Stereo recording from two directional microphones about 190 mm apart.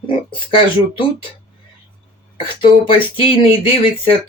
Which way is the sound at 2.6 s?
30° left (ahead or behind).